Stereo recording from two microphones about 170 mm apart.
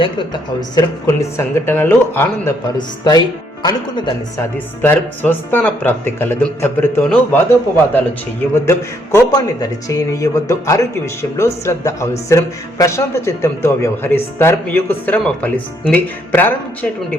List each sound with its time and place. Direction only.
0.8 s speech: 15° left (ahead or behind)
2.7 s speech: 25° left (ahead or behind)
4.5 s speech: 10° left (ahead or behind)
8.5 s speech: 15° left (ahead or behind)